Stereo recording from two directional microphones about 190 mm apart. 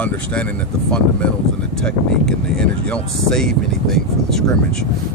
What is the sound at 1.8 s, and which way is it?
Speech, 5° left (ahead or behind).